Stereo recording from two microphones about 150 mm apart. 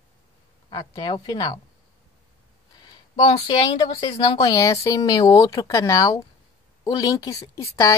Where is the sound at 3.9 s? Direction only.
45° left (ahead or behind).